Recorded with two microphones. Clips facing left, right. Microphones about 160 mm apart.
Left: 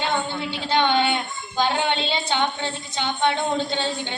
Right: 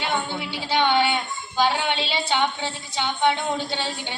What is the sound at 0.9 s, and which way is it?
Child singing, 20° left (ahead or behind).